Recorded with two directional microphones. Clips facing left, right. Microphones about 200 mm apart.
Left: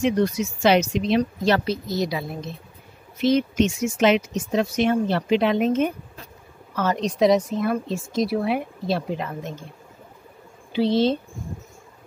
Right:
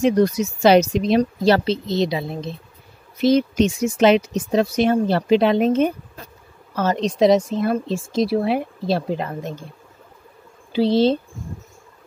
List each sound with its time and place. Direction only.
0.0 s speech: 40° right (ahead or behind)
3.2 s speech: 35° right (ahead or behind)
10.7 s speech: 35° right (ahead or behind)